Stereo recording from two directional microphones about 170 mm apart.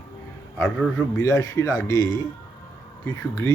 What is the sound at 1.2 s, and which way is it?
Speech, 20° left (ahead or behind).